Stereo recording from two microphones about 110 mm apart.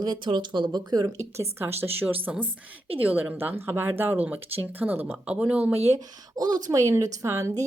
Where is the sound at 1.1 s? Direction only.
25° right (ahead or behind).